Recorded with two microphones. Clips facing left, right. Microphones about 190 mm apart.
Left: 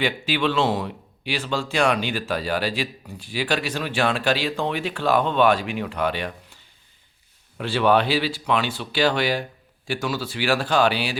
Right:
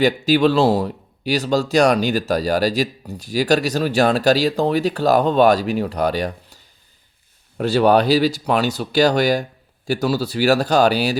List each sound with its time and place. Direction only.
0.0 s speech: 40° right (ahead or behind)
7.6 s speech: 40° right (ahead or behind)